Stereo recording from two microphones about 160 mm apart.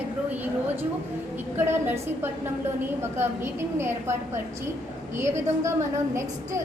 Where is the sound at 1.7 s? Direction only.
15° right (ahead or behind).